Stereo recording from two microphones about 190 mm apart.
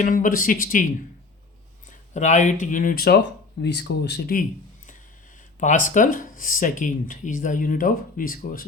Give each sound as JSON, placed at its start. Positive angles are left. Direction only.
{"t": 0.0, "sound": "speech", "side_deg": 45}
{"t": 1.9, "sound": "speech", "side_deg": 40}
{"t": 5.5, "sound": "speech", "side_deg": 45}